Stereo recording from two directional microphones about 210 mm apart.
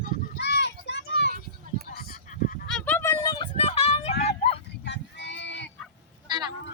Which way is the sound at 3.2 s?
20° left (ahead or behind).